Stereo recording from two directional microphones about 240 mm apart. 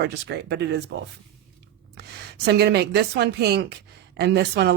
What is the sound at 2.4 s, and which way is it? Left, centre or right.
Speech, right.